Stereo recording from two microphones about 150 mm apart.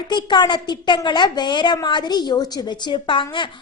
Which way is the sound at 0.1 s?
30° left (ahead or behind).